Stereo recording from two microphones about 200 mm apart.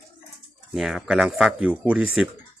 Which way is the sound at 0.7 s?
Centre (ahead or behind).